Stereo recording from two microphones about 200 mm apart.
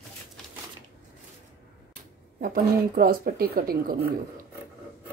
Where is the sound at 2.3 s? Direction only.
45° right (ahead or behind).